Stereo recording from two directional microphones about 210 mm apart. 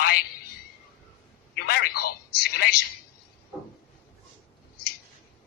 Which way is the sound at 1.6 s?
45° left (ahead or behind).